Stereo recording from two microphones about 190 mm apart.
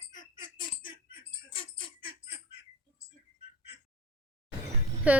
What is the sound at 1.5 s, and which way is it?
Giggle, 30° left (ahead or behind).